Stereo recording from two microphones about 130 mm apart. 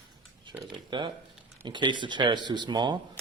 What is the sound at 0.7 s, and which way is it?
Speech, 40° right (ahead or behind).